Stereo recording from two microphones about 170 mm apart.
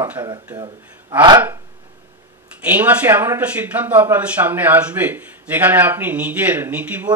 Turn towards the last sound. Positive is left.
turn(degrees=-10)  # may be behind; listen again after turning